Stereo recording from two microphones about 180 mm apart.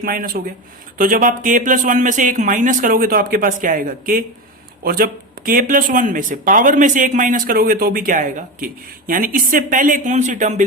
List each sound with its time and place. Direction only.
0.0 s speech: 50° right (ahead or behind)